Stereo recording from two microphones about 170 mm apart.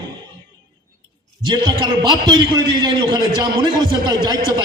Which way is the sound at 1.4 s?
25° right (ahead or behind).